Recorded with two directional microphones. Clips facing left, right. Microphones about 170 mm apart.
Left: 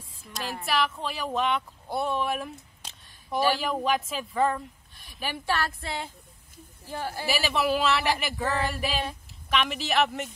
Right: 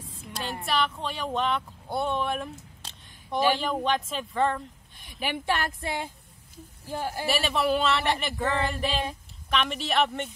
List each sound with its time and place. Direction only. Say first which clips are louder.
0.7 s speech: even; 5° left (ahead or behind)
5.2 s speech: right 1 dB; 20° right (ahead or behind)
7.2 s speech: even; centre (ahead or behind)